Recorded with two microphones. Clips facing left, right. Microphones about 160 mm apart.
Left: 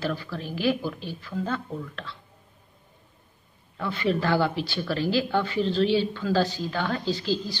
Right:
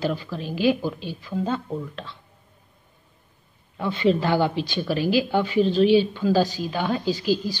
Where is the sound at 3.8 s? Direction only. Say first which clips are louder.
Right 5 dB; 20° right (ahead or behind).